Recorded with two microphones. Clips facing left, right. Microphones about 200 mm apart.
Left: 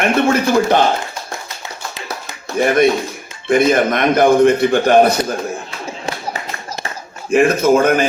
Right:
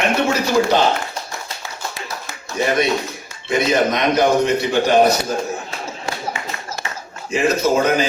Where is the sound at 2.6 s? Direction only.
50° left (ahead or behind).